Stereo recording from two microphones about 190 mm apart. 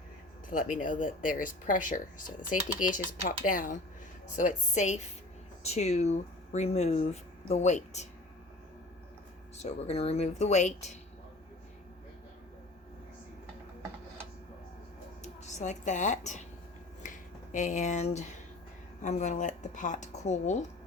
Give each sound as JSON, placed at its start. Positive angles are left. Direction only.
{"t": 0.5, "sound": "speech", "side_deg": 45}
{"t": 9.6, "sound": "speech", "side_deg": 35}
{"t": 15.2, "sound": "speech", "side_deg": 40}
{"t": 17.0, "sound": "finger snapping", "side_deg": 40}
{"t": 19.0, "sound": "speech", "side_deg": 40}